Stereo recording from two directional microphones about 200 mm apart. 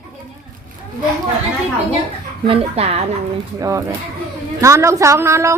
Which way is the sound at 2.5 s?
30° right (ahead or behind).